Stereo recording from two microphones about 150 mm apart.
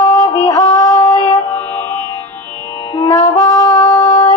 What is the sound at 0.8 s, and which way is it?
Female singing, 20° left (ahead or behind).